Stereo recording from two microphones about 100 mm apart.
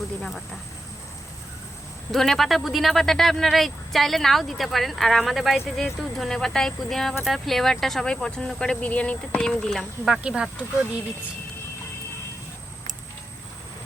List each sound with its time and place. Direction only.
0.2 s speech: 5° left (ahead or behind)
2.1 s speech: centre (ahead or behind)